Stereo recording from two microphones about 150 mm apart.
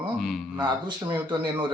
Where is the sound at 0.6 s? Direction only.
30° right (ahead or behind).